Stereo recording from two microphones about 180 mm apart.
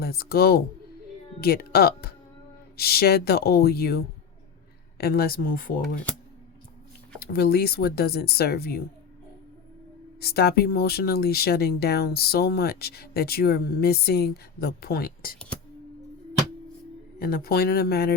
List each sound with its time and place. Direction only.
0.0 s speech: 60° left (ahead or behind)
7.2 s speech: 60° left (ahead or behind)
10.2 s speech: 60° left (ahead or behind)
17.2 s speech: 55° left (ahead or behind)